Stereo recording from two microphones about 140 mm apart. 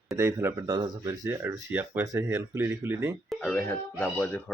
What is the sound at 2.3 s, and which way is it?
Speech, 15° right (ahead or behind).